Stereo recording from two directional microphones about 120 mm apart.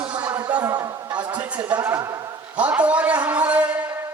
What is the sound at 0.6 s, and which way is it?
A man's voice, 25° right (ahead or behind).